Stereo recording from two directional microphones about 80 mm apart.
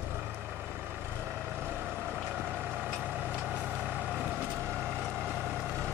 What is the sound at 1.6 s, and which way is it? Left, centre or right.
Vehicle, right.